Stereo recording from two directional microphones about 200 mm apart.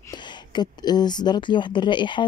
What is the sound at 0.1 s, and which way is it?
Speech, 20° left (ahead or behind).